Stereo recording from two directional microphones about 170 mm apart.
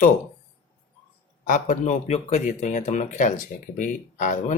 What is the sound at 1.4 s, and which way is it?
Speech, 50° left (ahead or behind).